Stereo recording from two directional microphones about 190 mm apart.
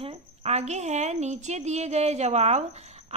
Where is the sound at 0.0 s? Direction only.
30° right (ahead or behind).